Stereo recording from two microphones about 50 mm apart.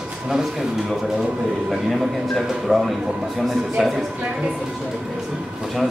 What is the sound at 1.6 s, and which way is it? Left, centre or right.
A man's voice, centre.